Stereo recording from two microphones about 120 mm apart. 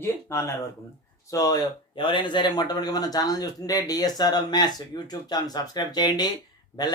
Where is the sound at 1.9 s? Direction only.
45° left (ahead or behind).